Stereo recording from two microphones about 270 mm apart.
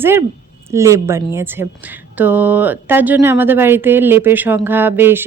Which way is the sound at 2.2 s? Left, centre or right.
Centre.